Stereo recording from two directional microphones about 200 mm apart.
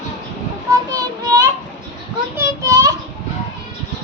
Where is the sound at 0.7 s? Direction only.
15° right (ahead or behind).